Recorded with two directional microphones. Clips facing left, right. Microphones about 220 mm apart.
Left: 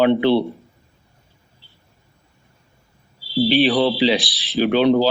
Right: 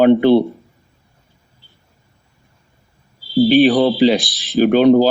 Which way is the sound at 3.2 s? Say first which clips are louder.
Right 6 dB; 45° right (ahead or behind).